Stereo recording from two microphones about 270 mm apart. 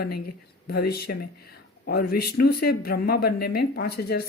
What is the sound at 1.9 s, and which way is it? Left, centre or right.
Speech, left.